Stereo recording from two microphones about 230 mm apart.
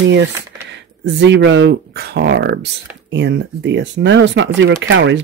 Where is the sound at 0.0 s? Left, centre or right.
Right.